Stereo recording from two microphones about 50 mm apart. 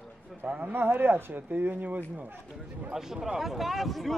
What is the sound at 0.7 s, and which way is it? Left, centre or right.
Speech, right.